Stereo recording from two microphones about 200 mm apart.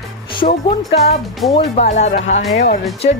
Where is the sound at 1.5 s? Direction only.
35° left (ahead or behind).